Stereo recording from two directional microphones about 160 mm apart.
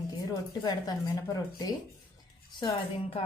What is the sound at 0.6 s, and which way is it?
Speech, 25° left (ahead or behind).